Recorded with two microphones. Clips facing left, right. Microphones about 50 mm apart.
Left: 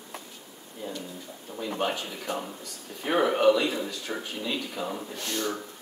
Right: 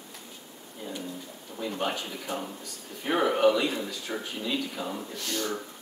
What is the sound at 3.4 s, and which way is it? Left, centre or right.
Speech, centre.